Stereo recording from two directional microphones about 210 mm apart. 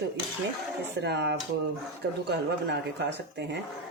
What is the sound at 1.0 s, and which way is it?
A woman's voice, 55° right (ahead or behind).